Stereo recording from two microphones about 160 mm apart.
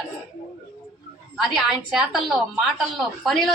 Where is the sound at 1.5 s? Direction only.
Centre (ahead or behind).